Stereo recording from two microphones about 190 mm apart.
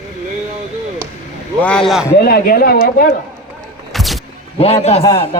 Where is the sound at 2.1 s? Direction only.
55° left (ahead or behind).